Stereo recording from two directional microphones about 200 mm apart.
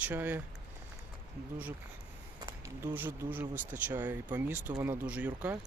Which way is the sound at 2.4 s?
20° right (ahead or behind).